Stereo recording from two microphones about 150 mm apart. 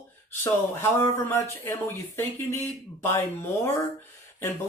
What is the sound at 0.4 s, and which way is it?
Speech, 15° left (ahead or behind).